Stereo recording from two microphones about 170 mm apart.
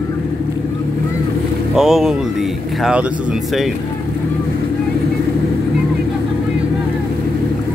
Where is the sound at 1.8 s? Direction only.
5° right (ahead or behind).